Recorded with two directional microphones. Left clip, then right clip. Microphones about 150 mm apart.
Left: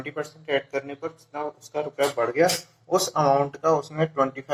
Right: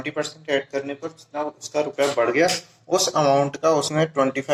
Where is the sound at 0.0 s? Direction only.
30° right (ahead or behind); by 3.9 s 45° right (ahead or behind).